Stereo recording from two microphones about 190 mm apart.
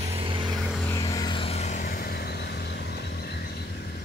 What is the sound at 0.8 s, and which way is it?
Vehicle, 15° left (ahead or behind).